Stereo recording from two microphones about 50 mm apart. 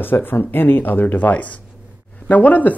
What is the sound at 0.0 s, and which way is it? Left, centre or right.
Speech, left.